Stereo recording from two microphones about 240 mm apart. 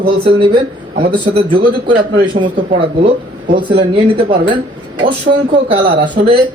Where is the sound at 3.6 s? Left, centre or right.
Centre.